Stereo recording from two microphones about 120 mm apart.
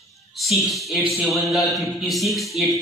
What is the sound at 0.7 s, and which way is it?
A man's voice, centre (ahead or behind).